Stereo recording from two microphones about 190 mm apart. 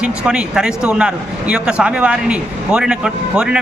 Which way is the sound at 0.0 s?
5° right (ahead or behind).